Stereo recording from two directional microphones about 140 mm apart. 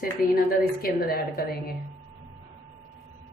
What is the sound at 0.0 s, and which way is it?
A woman's voice, 90° left.